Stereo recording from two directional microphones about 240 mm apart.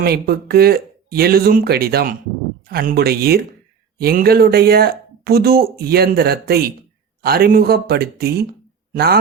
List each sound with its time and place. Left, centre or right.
0.0 s speech: right